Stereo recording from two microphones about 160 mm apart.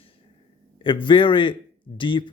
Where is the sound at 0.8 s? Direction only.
30° left (ahead or behind).